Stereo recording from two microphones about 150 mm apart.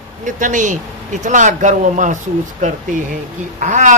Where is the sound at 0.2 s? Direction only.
60° right (ahead or behind).